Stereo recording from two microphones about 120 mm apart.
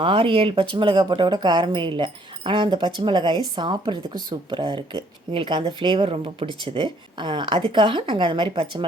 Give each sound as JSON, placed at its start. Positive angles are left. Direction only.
{"t": 0.0, "sound": "speech", "side_deg": -45}